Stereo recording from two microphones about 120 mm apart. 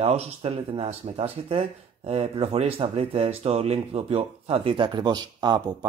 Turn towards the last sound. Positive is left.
turn(degrees=-35)  # may be behind; listen again after turning